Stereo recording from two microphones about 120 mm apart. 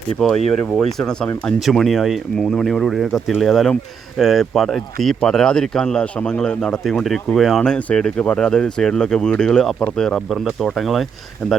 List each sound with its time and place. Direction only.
0.2 s speech: 5° left (ahead or behind)